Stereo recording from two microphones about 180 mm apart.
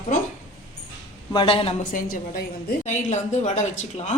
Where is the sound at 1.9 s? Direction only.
55° left (ahead or behind).